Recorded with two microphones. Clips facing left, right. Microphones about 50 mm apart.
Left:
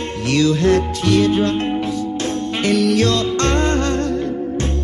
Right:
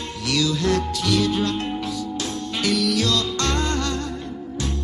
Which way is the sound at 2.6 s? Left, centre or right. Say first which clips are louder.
Left 6 dB; left.